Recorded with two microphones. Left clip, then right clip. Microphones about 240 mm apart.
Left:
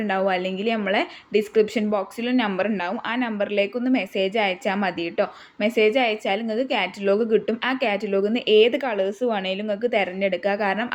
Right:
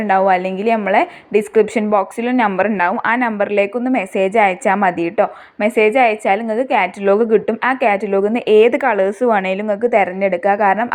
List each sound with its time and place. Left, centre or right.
0.1 s a woman's voice: centre
8.5 s a woman's voice: right